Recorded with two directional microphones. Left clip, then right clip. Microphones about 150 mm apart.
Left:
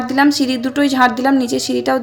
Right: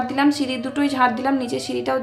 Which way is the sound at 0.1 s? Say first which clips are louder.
Left 9 dB; 40° left (ahead or behind).